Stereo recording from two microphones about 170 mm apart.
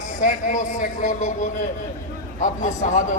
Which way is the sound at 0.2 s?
45° left (ahead or behind).